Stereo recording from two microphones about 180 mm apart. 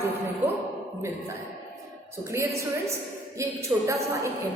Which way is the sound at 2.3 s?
15° right (ahead or behind).